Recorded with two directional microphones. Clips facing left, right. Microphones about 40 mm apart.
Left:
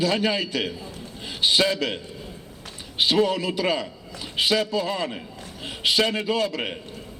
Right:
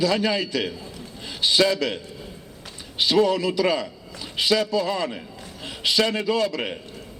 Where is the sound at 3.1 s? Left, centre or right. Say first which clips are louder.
Right 3 dB; left.